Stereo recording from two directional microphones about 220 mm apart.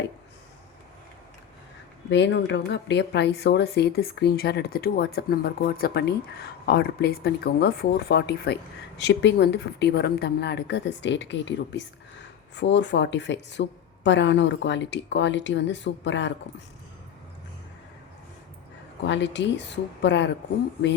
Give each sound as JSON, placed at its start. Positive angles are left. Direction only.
{"t": 2.0, "sound": "a woman's voice", "side_deg": 55}
{"t": 19.0, "sound": "speech", "side_deg": 55}